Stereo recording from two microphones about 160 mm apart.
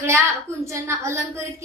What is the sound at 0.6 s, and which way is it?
Speech, 15° right (ahead or behind).